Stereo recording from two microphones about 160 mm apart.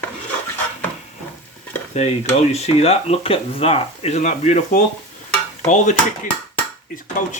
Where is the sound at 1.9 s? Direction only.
45° left (ahead or behind).